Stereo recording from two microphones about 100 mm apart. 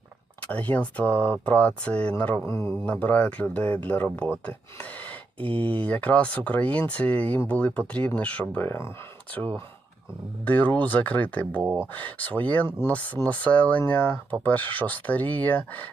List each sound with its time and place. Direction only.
0.5 s speech: 15° left (ahead or behind)
5.4 s speech: 65° right (ahead or behind)
5.6 s speech: 15° left (ahead or behind)